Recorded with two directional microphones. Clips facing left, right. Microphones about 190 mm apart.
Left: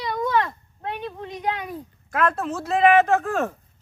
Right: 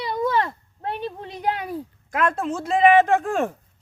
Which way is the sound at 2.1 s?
15° right (ahead or behind).